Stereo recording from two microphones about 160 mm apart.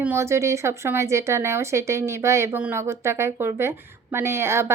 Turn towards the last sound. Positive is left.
turn(degrees=-15)  # may be behind; listen again after turning